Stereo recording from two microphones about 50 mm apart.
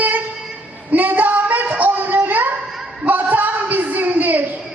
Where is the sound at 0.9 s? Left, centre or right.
Right.